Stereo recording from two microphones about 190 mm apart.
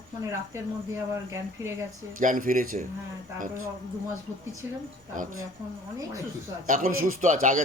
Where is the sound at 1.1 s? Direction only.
15° right (ahead or behind).